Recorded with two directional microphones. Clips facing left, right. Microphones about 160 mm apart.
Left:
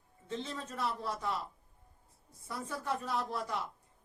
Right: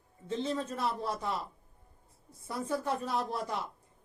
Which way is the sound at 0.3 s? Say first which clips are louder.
Right 7 dB; 25° right (ahead or behind).